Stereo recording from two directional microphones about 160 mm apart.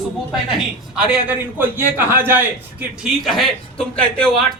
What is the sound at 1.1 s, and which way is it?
A man's voice, 10° right (ahead or behind).